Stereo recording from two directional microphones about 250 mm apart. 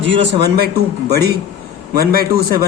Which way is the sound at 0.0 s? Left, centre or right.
Right.